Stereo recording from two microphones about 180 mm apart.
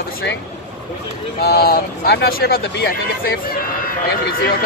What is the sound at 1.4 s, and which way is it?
Speech, 60° left (ahead or behind).